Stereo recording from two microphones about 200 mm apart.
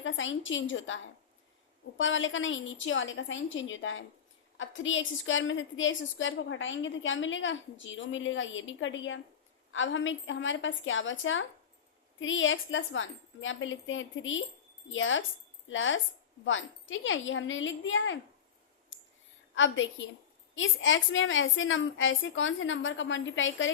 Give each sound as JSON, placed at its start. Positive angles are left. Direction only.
{"t": 0.0, "sound": "a woman's voice", "side_deg": 75}
{"t": 18.9, "sound": "clicking", "side_deg": 70}
{"t": 19.5, "sound": "a woman's voice", "side_deg": 70}